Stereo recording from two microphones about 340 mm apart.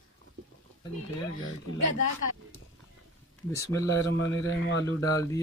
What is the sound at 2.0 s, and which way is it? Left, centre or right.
Speech, right.